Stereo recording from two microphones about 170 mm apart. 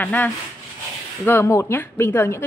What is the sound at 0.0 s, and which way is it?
Speech, 10° left (ahead or behind).